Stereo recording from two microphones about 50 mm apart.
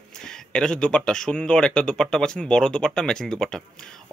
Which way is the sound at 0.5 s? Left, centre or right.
Centre.